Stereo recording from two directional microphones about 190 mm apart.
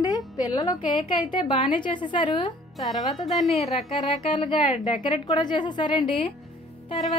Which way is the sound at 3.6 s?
35° left (ahead or behind).